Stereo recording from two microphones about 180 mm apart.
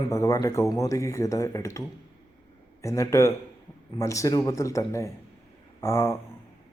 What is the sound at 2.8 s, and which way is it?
A man's voice, 15° left (ahead or behind).